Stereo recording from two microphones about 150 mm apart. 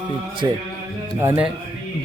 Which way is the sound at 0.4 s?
25° right (ahead or behind).